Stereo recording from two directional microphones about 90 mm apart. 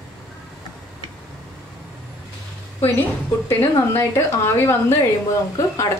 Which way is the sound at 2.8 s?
25° left (ahead or behind).